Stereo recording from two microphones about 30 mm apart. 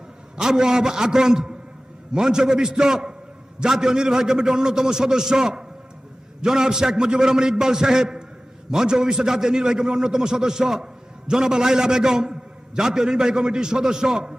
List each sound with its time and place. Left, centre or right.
0.3 s a man's voice: right